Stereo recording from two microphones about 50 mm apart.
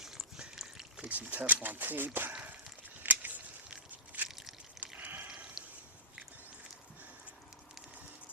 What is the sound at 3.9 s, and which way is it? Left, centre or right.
Biting, right.